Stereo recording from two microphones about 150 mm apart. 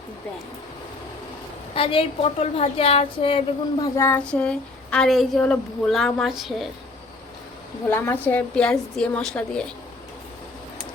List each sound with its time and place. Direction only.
1.7 s a woman's voice: 40° left (ahead or behind)
3.9 s a woman's voice: 15° left (ahead or behind)
4.3 s a woman's voice: 5° left (ahead or behind)
7.9 s a woman's voice: 15° left (ahead or behind)